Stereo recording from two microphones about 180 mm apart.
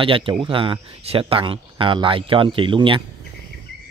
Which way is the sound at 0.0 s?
30° right (ahead or behind).